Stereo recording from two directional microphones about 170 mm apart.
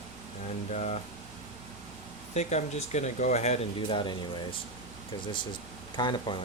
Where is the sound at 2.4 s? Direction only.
40° left (ahead or behind).